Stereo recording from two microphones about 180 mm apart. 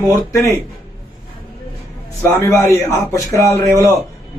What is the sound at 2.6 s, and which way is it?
Speech, 15° left (ahead or behind).